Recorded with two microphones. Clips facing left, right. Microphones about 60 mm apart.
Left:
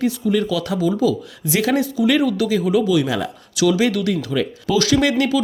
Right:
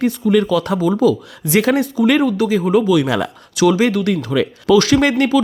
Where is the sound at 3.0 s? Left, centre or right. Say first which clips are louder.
Right 3 dB; right.